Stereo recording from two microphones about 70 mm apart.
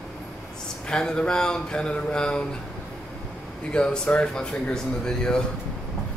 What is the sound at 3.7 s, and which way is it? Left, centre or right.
Speech, centre.